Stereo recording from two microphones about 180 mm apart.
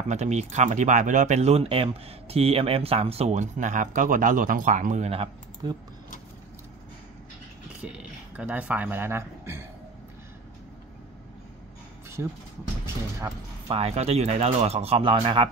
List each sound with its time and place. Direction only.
0.1 s speech: 40° right (ahead or behind)
7.8 s speech: 5° right (ahead or behind)
13.7 s speech: 35° right (ahead or behind)